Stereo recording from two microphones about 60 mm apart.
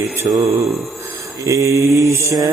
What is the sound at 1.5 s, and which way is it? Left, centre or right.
Mantra, right.